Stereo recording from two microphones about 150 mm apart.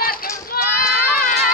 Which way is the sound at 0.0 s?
75° left (ahead or behind).